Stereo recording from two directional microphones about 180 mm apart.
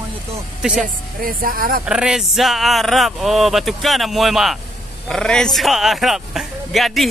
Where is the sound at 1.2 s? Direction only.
50° right (ahead or behind).